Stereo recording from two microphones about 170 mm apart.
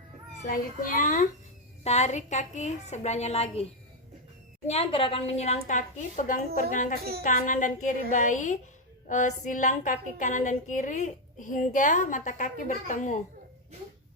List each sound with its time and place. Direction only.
0.4 s a woman's voice: 55° left (ahead or behind); by 3.7 s 35° left (ahead or behind)
4.7 s a woman's voice: 30° left (ahead or behind)